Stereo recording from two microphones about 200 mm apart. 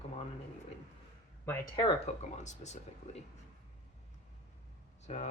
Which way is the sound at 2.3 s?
35° left (ahead or behind).